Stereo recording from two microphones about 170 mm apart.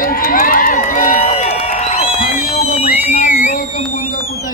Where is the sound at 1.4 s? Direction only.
40° left (ahead or behind).